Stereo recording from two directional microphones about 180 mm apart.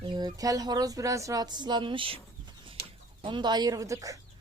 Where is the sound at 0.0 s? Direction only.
25° right (ahead or behind).